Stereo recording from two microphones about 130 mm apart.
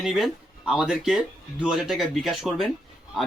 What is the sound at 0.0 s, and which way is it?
Speech, centre (ahead or behind).